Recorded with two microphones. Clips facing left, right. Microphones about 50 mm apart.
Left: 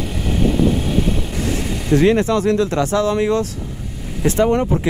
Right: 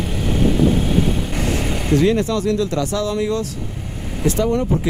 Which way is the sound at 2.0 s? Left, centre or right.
Left.